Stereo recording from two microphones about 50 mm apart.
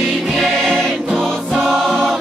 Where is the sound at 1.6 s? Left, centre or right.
Centre.